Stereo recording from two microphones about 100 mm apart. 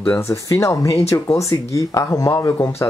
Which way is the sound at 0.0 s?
25° left (ahead or behind).